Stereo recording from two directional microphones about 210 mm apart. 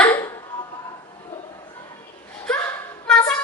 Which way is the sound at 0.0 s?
10° left (ahead or behind).